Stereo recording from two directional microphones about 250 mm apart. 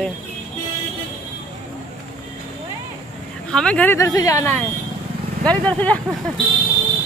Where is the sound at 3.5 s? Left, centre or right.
Centre.